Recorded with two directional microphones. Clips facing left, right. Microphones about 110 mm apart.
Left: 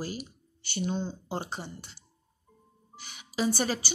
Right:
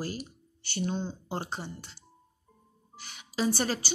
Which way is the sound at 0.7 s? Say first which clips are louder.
Left 1 dB; 15° left (ahead or behind).